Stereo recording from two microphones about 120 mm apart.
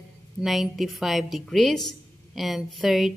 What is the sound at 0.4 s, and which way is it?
A woman's voice, centre (ahead or behind).